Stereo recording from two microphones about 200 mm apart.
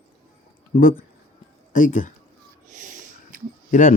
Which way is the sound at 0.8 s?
45° left (ahead or behind).